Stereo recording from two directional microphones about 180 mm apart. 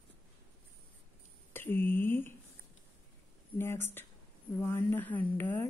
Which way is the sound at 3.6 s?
15° left (ahead or behind).